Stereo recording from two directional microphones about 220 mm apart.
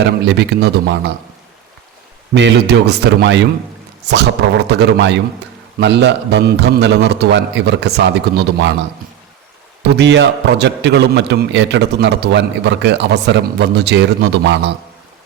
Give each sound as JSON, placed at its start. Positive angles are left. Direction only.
{"t": 0.0, "sound": "a man's voice", "side_deg": -50}
{"t": 2.3, "sound": "a man's voice", "side_deg": -50}
{"t": 4.7, "sound": "a man's voice", "side_deg": -50}
{"t": 10.0, "sound": "a man's voice", "side_deg": -50}